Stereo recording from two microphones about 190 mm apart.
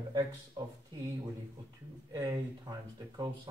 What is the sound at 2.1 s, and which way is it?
Speech, 15° right (ahead or behind).